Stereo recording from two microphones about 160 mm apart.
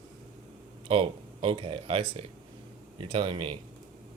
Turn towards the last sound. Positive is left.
turn(degrees=-35)  # may be behind; listen again after turning